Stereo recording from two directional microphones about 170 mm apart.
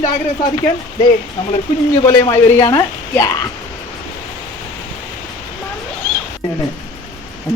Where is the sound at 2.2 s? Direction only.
20° left (ahead or behind).